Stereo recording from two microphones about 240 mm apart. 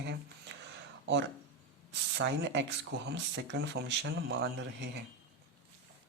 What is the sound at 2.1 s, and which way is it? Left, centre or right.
Speech, right.